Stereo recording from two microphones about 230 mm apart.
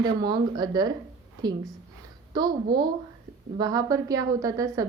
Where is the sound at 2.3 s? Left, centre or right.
Centre.